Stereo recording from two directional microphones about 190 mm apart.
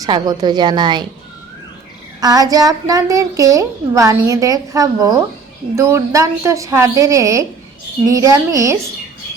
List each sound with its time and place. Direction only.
0.0 s a woman's voice: 20° right (ahead or behind)
2.2 s a woman's voice: 20° right (ahead or behind)